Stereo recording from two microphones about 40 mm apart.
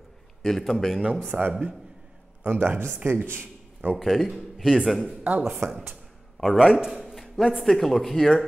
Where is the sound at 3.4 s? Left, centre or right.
Right.